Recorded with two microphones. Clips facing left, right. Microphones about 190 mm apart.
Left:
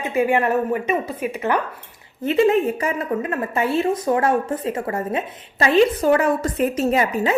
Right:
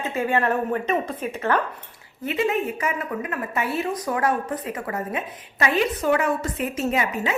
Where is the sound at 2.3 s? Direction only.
30° left (ahead or behind).